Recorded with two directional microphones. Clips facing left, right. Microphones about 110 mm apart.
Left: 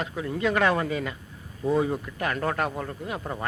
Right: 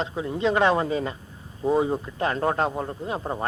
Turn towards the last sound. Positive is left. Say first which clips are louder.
# right 4 dB
turn(degrees=-30)  # may be behind; listen again after turning